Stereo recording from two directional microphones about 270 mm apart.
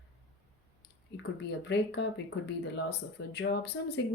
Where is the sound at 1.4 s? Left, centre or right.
Left.